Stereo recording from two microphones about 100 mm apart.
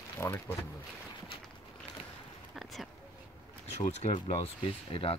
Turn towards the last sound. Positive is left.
turn(degrees=65)  # may be behind; listen again after turning